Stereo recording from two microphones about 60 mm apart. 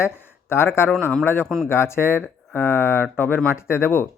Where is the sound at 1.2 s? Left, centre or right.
Left.